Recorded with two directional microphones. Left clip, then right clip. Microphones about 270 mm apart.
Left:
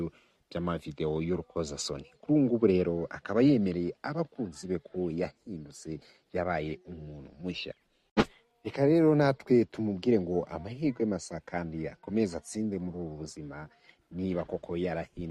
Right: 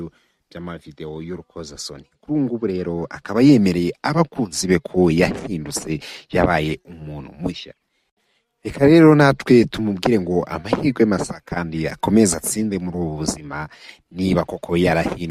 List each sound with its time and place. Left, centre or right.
0.5 s speech: centre
2.3 s speech: right
2.9 s speech: right
3.6 s speech: right
7.5 s speech: centre
8.6 s speech: right